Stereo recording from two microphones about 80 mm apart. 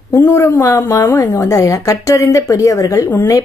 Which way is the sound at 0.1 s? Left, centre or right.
Left.